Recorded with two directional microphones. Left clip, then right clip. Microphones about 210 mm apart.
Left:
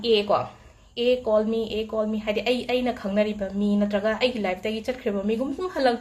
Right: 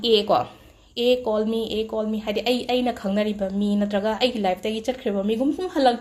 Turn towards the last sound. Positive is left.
turn(degrees=-30)  # may be behind; listen again after turning